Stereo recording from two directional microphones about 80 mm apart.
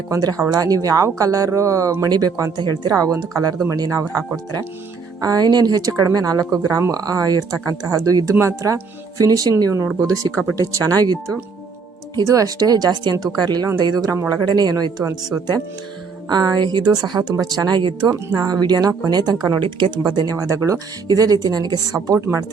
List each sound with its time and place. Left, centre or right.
0.1 s speech: right
2.0 s speech: right
5.2 s speech: right
16.3 s speech: right
18.1 s speech: right
18.4 s speech: right
20.5 s speech: right